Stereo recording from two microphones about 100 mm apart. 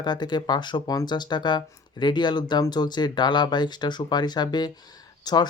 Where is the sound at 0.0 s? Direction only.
45° left (ahead or behind).